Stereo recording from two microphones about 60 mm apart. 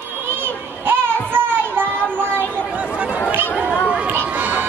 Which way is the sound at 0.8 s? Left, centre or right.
Right.